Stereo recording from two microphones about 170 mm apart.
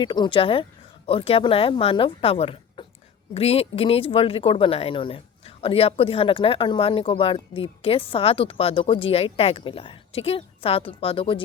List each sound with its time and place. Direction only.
0.0 s speech: 25° left (ahead or behind)